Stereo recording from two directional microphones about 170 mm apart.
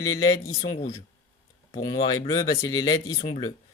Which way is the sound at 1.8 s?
20° left (ahead or behind).